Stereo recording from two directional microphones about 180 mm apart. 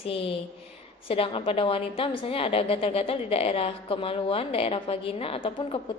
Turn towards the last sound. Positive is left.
turn(degrees=30)  # may be behind; listen again after turning